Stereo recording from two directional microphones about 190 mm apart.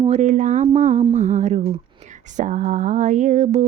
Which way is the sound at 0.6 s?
35° right (ahead or behind).